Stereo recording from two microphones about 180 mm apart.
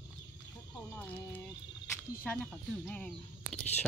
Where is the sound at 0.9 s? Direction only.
10° left (ahead or behind).